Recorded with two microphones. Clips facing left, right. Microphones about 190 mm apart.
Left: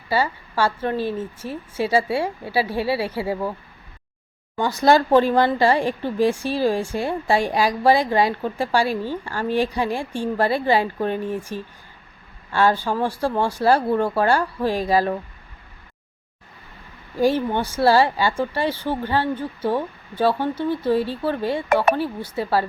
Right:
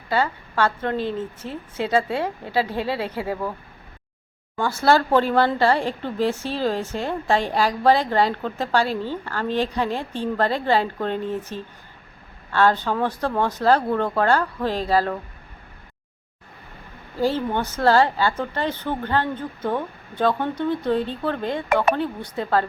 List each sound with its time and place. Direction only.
0.1 s a woman's voice: 10° left (ahead or behind)
4.5 s a woman's voice: 15° left (ahead or behind)
17.2 s a woman's voice: 15° left (ahead or behind)